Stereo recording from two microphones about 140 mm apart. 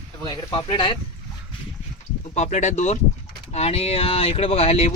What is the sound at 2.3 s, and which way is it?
Speech, 55° left (ahead or behind).